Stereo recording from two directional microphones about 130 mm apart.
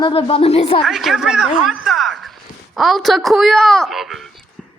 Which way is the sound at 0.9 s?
Centre (ahead or behind).